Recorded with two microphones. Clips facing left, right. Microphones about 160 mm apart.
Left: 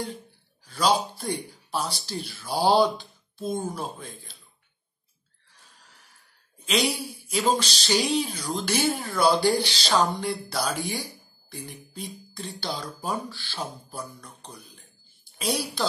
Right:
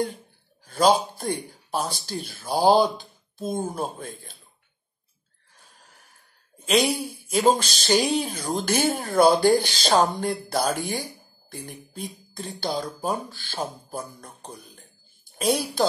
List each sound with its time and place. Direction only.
0.7 s speech: 50° right (ahead or behind)
5.5 s a sound: 50° right (ahead or behind)
6.6 s speech: 45° right (ahead or behind)